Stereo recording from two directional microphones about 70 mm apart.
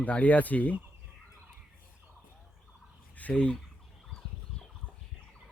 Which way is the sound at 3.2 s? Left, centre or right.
Centre.